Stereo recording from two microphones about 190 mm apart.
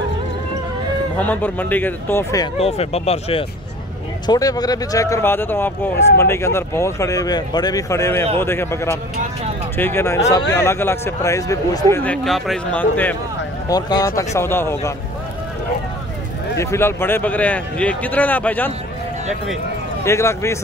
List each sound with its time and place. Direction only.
1.2 s speech: 10° left (ahead or behind)
2.6 s speech: 35° left (ahead or behind)
4.3 s speech: 20° left (ahead or behind)
13.7 s speech: 20° left (ahead or behind)
16.5 s speech: 15° left (ahead or behind)
20.1 s speech: 15° left (ahead or behind)